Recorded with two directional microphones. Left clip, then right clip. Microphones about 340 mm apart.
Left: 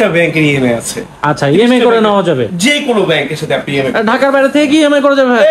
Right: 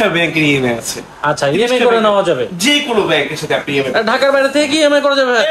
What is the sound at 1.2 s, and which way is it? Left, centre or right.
A man's voice, centre.